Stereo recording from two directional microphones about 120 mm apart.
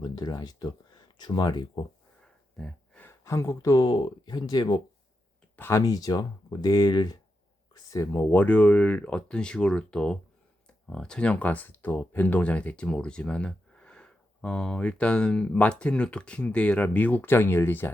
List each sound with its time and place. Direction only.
0.0 s speech: 35° left (ahead or behind)
2.6 s gasp: 5° left (ahead or behind)
3.1 s speech: 25° left (ahead or behind)
5.5 s speech: 20° left (ahead or behind)
5.8 s speech: 30° left (ahead or behind)